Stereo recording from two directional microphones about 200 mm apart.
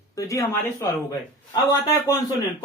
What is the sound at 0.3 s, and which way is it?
Speech, 15° left (ahead or behind).